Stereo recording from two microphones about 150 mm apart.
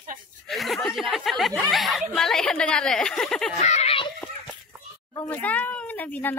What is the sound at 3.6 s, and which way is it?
Speech, 50° left (ahead or behind).